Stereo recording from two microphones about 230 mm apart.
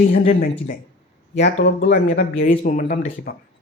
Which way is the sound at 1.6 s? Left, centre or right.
Left.